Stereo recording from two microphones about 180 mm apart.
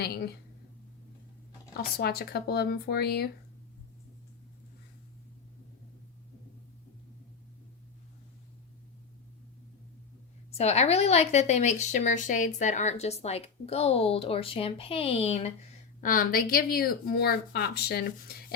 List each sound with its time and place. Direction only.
0.0 s a woman's voice: 60° left (ahead or behind)
1.7 s speech: 60° left (ahead or behind)
10.5 s a woman's voice: 35° left (ahead or behind)
16.0 s speech: 50° left (ahead or behind)